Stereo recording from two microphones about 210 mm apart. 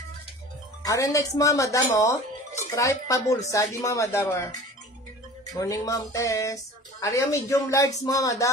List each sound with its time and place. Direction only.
0.8 s speech: 15° left (ahead or behind)
5.5 s speech: 15° left (ahead or behind)